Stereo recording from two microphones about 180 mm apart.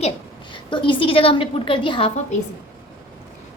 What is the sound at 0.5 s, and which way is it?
A woman's voice, 25° left (ahead or behind).